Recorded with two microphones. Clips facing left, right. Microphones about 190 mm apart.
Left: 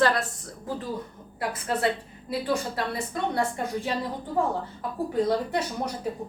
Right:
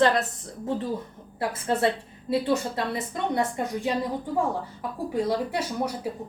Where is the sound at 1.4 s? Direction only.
25° right (ahead or behind).